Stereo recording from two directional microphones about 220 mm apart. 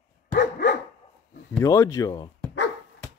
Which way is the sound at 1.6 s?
15° left (ahead or behind).